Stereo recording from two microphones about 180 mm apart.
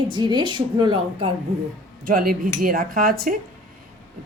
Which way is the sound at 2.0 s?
50° right (ahead or behind).